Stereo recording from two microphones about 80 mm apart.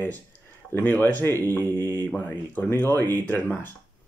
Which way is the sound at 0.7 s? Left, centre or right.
Left.